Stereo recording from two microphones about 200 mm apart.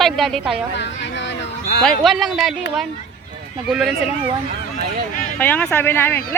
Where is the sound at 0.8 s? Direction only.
60° left (ahead or behind).